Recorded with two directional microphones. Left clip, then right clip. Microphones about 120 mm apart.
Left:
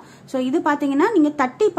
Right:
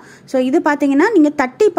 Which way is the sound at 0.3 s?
35° right (ahead or behind).